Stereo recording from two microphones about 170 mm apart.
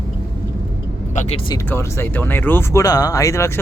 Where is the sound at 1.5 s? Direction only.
15° left (ahead or behind).